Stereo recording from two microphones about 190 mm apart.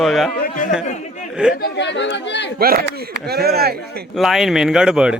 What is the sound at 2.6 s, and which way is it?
Speech, 50° right (ahead or behind).